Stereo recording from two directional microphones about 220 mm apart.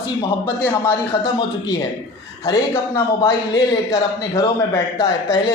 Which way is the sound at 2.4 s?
10° left (ahead or behind).